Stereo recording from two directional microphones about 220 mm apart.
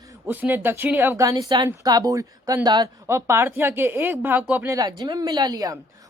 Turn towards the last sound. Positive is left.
turn(degrees=-15)  # may be behind; listen again after turning